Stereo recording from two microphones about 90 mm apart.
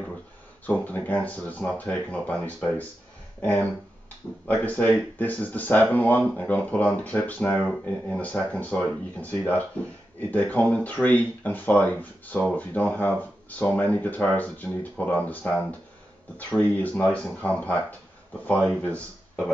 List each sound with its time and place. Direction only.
0.7 s speech: 15° left (ahead or behind)
4.5 s speech: 15° left (ahead or behind)
18.8 s speech: 15° left (ahead or behind)